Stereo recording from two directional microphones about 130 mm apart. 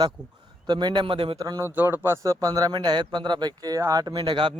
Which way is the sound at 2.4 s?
30° right (ahead or behind).